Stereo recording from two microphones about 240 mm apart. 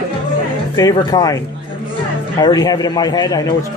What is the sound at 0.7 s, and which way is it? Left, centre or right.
A man's voice, centre.